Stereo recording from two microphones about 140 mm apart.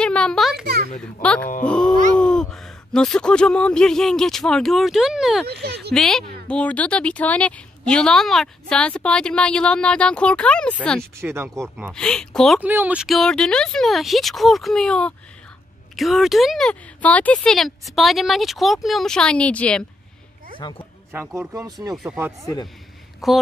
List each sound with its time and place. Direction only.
0.0 s a child's voice: 5° left (ahead or behind)
11.1 s speech: 20° right (ahead or behind)
11.9 s speech: 5° left (ahead or behind)
12.5 s speech: 10° right (ahead or behind); by 19.8 s 10° left (ahead or behind)
20.5 s speech: 35° left (ahead or behind)
21.4 s speech: 25° right (ahead or behind)
21.9 s speech: centre (ahead or behind)
23.2 s speech: centre (ahead or behind)